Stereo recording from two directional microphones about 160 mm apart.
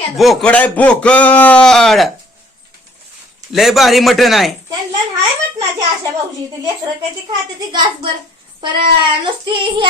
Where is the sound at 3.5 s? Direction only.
Centre (ahead or behind).